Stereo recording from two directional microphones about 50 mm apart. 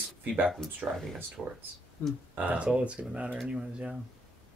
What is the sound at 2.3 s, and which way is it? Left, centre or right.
Speech, right.